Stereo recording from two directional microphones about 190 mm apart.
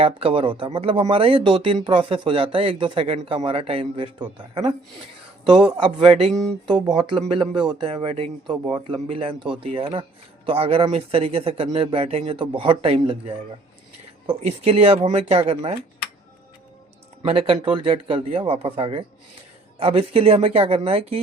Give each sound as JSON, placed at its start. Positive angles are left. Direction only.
{"t": 0.0, "sound": "speech", "side_deg": -30}
{"t": 5.7, "sound": "speech", "side_deg": -30}
{"t": 17.2, "sound": "speech", "side_deg": -30}